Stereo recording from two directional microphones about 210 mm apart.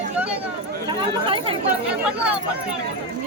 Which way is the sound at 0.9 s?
25° right (ahead or behind).